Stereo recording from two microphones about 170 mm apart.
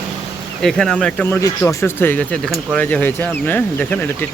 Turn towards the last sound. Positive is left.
turn(degrees=10)  # may be behind; listen again after turning